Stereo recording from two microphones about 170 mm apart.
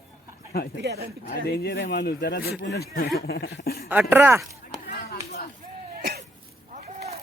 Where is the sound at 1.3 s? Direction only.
65° left (ahead or behind).